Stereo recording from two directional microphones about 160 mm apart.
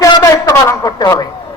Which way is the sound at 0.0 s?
20° left (ahead or behind).